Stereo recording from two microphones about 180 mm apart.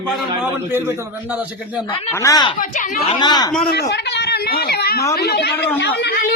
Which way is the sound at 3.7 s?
65° left (ahead or behind).